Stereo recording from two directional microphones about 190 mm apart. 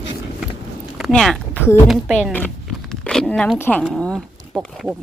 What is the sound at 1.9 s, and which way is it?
Speech, centre (ahead or behind).